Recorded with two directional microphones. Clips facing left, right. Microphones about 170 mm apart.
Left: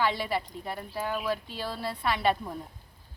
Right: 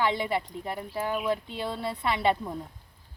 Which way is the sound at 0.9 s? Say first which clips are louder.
Right 2 dB; centre (ahead or behind).